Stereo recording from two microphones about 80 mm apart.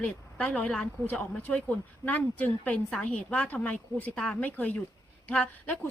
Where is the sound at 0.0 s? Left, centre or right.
Centre.